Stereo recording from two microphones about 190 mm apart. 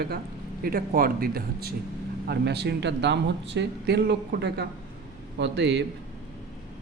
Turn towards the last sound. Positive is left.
turn(degrees=-65)  # may be behind; listen again after turning